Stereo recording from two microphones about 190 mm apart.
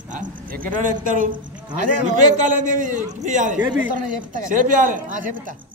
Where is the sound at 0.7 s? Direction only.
45° right (ahead or behind).